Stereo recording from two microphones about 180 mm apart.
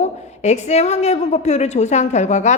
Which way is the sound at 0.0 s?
40° left (ahead or behind).